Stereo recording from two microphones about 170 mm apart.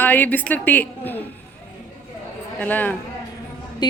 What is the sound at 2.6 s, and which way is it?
Speech, 10° left (ahead or behind).